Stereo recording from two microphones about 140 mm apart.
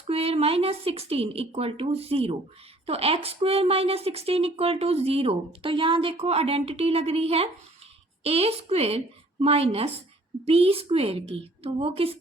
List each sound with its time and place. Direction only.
0.1 s speech: 45° right (ahead or behind)